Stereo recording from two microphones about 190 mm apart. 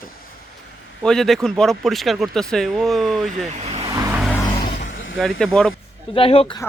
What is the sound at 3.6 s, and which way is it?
Vehicle, 35° right (ahead or behind).